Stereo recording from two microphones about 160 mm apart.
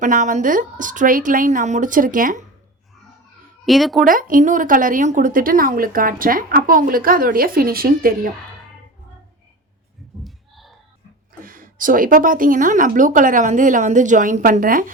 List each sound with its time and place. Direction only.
0.0 s speech: 50° right (ahead or behind)
3.7 s speech: centre (ahead or behind)
4.0 s speech: 60° right (ahead or behind)
10.2 s a sound: centre (ahead or behind)
11.4 s speech: 60° right (ahead or behind)